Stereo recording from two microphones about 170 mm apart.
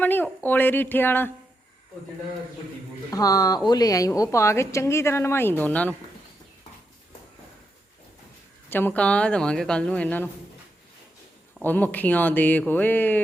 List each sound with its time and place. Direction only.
0.0 s a woman's voice: 10° left (ahead or behind)
3.1 s a woman's voice: 20° left (ahead or behind)
8.7 s a woman's voice: 10° left (ahead or behind)
11.6 s a woman's voice: 10° left (ahead or behind)